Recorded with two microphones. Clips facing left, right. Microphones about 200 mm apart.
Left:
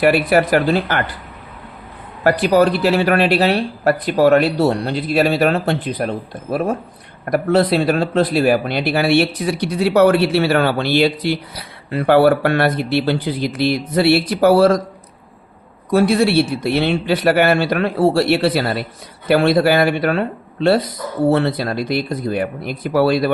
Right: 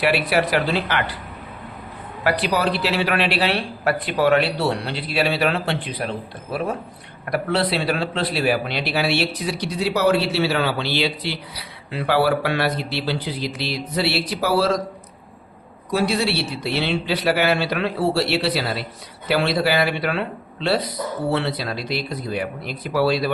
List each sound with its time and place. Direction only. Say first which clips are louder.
0.0 s speech: left 6 dB; 50° left (ahead or behind)
2.2 s speech: left 7 dB; 45° left (ahead or behind)
15.9 s speech: left 7 dB; 50° left (ahead or behind)